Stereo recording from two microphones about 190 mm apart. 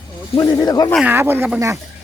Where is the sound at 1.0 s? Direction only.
10° right (ahead or behind).